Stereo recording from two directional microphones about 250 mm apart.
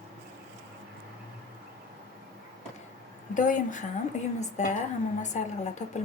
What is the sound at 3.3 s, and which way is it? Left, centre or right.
A woman's voice, left.